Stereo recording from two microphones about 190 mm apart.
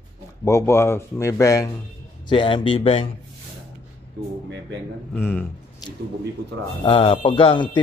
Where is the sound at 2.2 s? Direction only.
25° left (ahead or behind).